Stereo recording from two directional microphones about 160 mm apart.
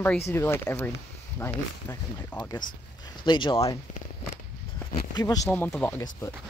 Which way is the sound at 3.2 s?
30° left (ahead or behind).